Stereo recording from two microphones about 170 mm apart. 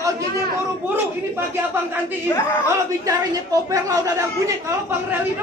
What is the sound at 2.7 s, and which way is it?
Speech, 20° right (ahead or behind).